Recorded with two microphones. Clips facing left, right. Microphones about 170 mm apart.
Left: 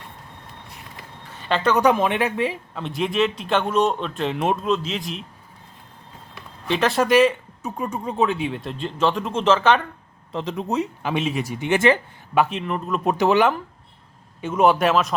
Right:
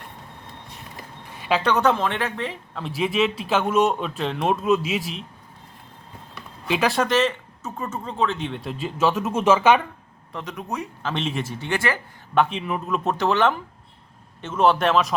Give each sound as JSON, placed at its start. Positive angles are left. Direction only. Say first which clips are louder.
{"t": 1.3, "sound": "a sound", "louder": "left 1 dB", "side_deg": -10}
{"t": 1.7, "sound": "a woman's voice", "louder": "left 5 dB", "side_deg": 15}
{"t": 2.7, "sound": "speech", "louder": "right 1 dB", "side_deg": 0}
{"t": 6.7, "sound": "speech", "louder": "left 1 dB", "side_deg": 0}
{"t": 7.1, "sound": "speech", "louder": "left 5 dB", "side_deg": 10}
{"t": 10.3, "sound": "speech", "louder": "left 6 dB", "side_deg": 30}
{"t": 11.1, "sound": "a woman's voice", "louder": "left 1 dB", "side_deg": 5}
{"t": 12.3, "sound": "speech", "louder": "left 1 dB", "side_deg": 5}
{"t": 13.1, "sound": "a woman's voice", "louder": "left 3 dB", "side_deg": 15}